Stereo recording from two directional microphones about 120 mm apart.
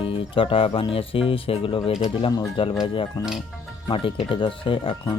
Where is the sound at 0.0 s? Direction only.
45° left (ahead or behind).